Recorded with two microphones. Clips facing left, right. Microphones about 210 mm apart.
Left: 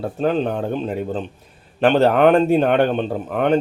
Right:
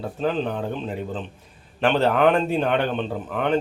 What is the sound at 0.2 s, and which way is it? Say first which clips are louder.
Speech: left 4 dB; 45° left (ahead or behind).